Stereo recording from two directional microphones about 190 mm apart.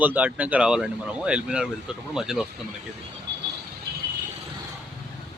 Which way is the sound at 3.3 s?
65° right (ahead or behind).